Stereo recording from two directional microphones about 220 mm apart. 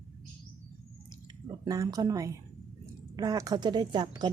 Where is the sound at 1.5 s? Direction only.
15° right (ahead or behind).